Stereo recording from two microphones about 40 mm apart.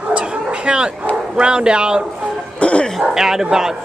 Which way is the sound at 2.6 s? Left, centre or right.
Left.